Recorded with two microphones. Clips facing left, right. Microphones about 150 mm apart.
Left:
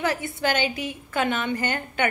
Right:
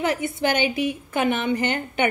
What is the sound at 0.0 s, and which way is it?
A woman's voice, 20° right (ahead or behind).